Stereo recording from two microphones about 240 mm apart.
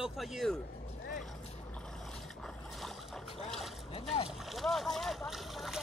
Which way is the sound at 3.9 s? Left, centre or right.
Left.